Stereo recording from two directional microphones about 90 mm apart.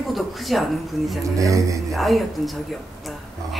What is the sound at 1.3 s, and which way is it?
Speech, 40° right (ahead or behind).